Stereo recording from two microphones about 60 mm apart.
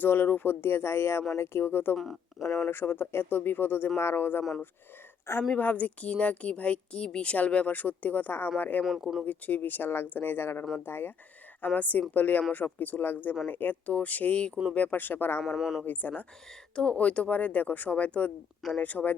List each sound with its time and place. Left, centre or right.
0.0 s speech: left
5.5 s a woman's voice: left
8.8 s speech: centre
9.2 s speech: left
11.6 s a woman's voice: left
15.5 s speech: centre
15.9 s speech: left
16.7 s a woman's voice: centre